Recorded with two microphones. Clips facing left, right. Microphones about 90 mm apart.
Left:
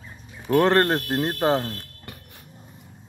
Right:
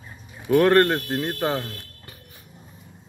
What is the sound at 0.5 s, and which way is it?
Speech, 25° left (ahead or behind).